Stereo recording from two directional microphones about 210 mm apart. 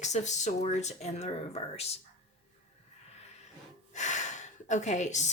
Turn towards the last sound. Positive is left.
turn(degrees=35)  # may be behind; listen again after turning